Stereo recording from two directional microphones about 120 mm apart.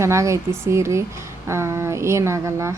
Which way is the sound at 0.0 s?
25° right (ahead or behind).